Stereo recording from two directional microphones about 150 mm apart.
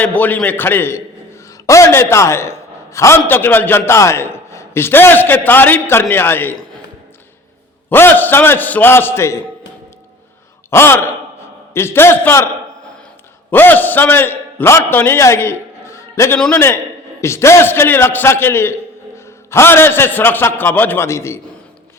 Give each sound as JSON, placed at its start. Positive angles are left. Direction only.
{"t": 0.0, "sound": "a man's voice", "side_deg": 10}
{"t": 7.9, "sound": "a man's voice", "side_deg": 15}
{"t": 10.7, "sound": "a man's voice", "side_deg": 15}
{"t": 13.5, "sound": "a man's voice", "side_deg": 10}